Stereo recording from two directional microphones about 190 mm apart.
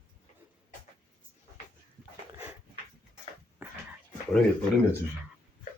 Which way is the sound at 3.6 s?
10° right (ahead or behind).